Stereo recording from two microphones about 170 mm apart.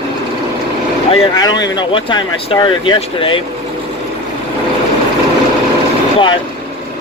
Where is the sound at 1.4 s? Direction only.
25° left (ahead or behind).